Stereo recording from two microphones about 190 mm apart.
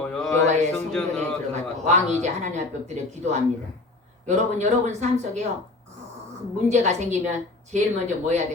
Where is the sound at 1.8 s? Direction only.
35° right (ahead or behind).